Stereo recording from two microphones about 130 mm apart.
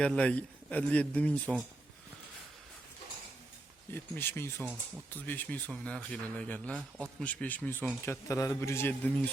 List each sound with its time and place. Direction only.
0.0 s speech: 10° left (ahead or behind)
3.9 s speech: 15° left (ahead or behind)